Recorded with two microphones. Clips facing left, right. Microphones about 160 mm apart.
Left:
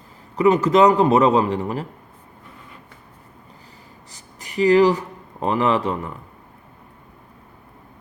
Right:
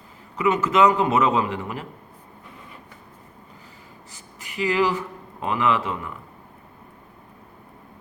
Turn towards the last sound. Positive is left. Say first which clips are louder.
# left 3 dB
turn(degrees=40)  # may be behind; listen again after turning